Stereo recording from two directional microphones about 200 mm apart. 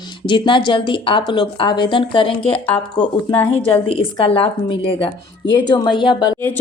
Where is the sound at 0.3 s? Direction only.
25° left (ahead or behind).